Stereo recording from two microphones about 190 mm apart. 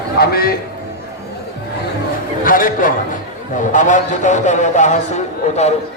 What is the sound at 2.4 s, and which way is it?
A man's voice, 45° left (ahead or behind).